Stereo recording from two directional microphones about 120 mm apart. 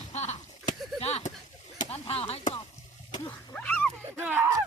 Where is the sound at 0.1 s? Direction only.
70° left (ahead or behind).